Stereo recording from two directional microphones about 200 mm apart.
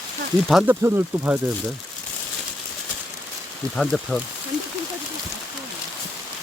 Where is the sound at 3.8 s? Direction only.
Centre (ahead or behind).